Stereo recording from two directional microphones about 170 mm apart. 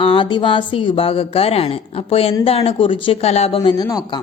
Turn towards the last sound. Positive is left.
turn(degrees=25)  # may be behind; listen again after turning